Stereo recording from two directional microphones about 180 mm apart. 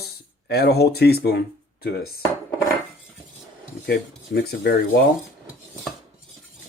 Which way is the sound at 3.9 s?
60° left (ahead or behind).